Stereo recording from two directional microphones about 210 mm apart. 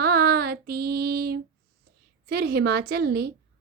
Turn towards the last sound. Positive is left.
turn(degrees=-50)  # may be behind; listen again after turning